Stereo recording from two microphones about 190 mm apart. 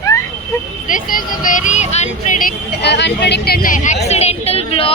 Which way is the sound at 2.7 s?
65° left (ahead or behind).